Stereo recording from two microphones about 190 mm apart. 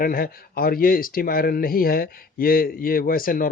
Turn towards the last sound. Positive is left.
turn(degrees=50)  # may be behind; listen again after turning